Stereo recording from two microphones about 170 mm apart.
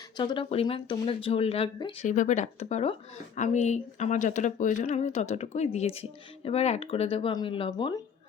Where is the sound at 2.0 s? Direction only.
45° left (ahead or behind).